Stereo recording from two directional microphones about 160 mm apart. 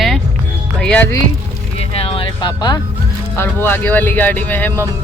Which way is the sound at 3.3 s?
15° left (ahead or behind).